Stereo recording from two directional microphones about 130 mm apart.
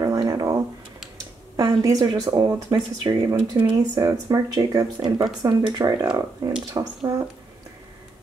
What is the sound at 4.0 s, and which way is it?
Speech, 30° right (ahead or behind).